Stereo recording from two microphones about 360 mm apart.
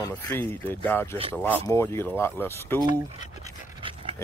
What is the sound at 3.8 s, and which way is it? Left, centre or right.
Dog, centre.